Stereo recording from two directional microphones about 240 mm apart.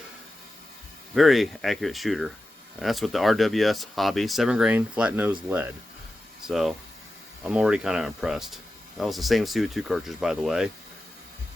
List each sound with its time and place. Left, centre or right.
1.1 s speech: centre